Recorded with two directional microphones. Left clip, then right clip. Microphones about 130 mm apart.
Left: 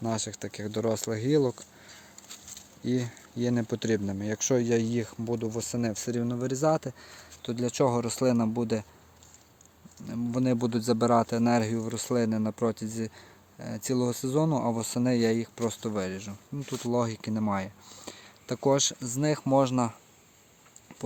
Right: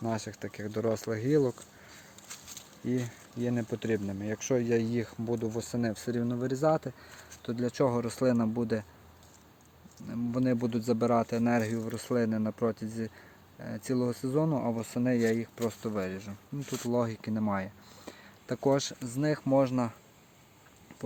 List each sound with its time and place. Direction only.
0.0 s speech: 30° left (ahead or behind)
2.8 s speech: 45° left (ahead or behind); by 8.9 s 25° left (ahead or behind)
10.1 s speech: 25° left (ahead or behind)
16.6 s speech: 10° left (ahead or behind)
16.9 s speech: 25° left (ahead or behind)